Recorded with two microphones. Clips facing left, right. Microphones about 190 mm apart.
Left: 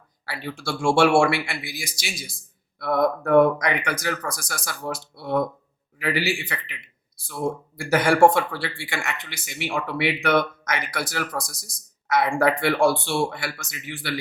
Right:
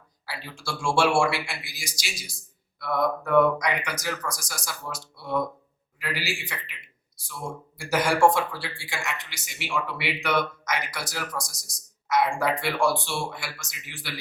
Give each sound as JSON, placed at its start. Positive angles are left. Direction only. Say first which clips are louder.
{"t": 0.3, "sound": "speech", "louder": "left 5 dB", "side_deg": 60}